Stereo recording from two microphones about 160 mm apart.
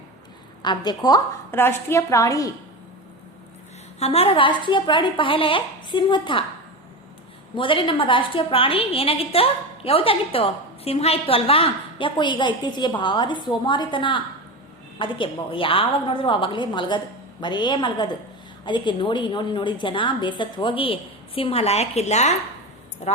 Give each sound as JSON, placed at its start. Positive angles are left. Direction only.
{"t": 0.6, "sound": "a woman's voice", "side_deg": 25}
{"t": 4.0, "sound": "a woman's voice", "side_deg": 40}
{"t": 7.5, "sound": "a woman's voice", "side_deg": 30}